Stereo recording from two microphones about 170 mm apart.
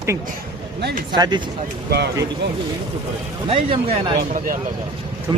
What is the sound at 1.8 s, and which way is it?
Speech, 75° right (ahead or behind).